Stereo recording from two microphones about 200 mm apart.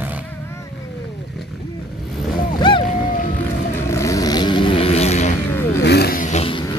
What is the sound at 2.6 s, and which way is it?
Boat, 25° left (ahead or behind).